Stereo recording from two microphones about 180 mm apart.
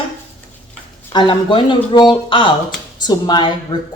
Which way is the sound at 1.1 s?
30° left (ahead or behind).